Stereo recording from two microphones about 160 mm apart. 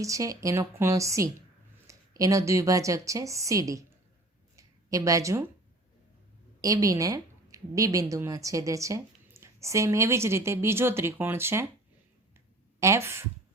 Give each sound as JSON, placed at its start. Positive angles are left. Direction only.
{"t": 0.0, "sound": "speech", "side_deg": -20}
{"t": 4.5, "sound": "a sound", "side_deg": -20}
{"t": 6.6, "sound": "speech", "side_deg": -20}
{"t": 12.8, "sound": "speech", "side_deg": -15}